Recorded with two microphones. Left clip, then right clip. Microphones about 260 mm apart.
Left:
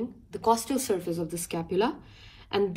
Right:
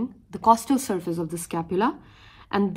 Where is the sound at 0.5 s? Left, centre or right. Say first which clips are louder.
Right 5 dB; right.